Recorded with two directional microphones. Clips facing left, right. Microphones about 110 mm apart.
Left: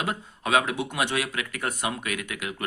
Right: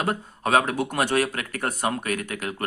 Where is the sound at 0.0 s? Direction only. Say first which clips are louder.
Right 4 dB; 45° right (ahead or behind).